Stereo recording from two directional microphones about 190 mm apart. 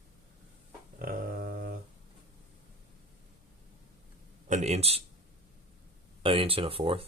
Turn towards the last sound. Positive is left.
turn(degrees=-30)  # may be behind; listen again after turning